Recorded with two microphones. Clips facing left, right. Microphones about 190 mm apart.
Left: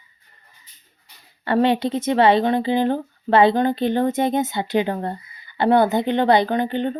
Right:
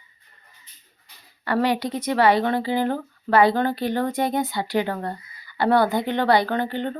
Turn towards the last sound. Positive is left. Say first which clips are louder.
# left 3 dB
turn(degrees=20)  # may be behind; listen again after turning